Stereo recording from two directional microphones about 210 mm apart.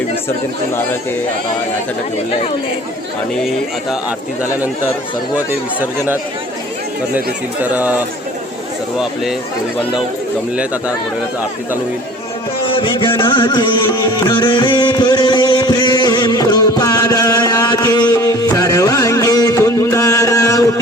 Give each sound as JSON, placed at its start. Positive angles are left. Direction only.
{"t": 3.3, "sound": "speech", "side_deg": 0}
{"t": 5.5, "sound": "speech", "side_deg": -10}
{"t": 7.6, "sound": "speech", "side_deg": -10}
{"t": 12.6, "sound": "a sound", "side_deg": 25}
{"t": 13.9, "sound": "music", "side_deg": 20}